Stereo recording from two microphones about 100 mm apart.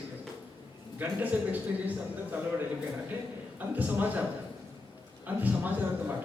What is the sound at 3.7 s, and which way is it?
Speech, 15° right (ahead or behind).